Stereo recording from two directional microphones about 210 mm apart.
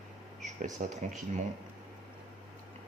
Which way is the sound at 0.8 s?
35° right (ahead or behind).